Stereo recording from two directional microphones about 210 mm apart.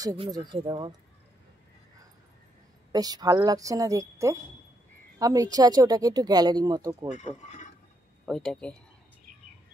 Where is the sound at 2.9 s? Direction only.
20° right (ahead or behind).